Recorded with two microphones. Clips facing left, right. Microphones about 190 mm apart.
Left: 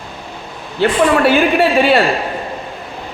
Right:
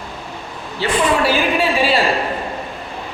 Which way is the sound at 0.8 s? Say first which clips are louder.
Left 5 dB; 55° left (ahead or behind).